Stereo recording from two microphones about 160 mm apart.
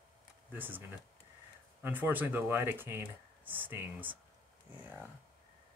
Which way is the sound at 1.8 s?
15° right (ahead or behind).